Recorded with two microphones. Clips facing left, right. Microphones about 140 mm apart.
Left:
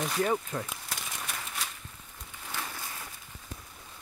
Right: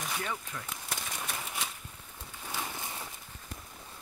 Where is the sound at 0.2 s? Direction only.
45° left (ahead or behind).